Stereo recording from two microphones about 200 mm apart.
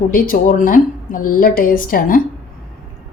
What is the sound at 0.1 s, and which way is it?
A woman's voice, 45° left (ahead or behind).